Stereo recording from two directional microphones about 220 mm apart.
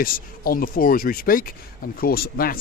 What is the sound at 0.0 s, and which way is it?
Speech, 40° left (ahead or behind).